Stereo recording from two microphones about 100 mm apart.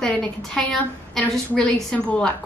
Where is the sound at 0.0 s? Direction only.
5° left (ahead or behind).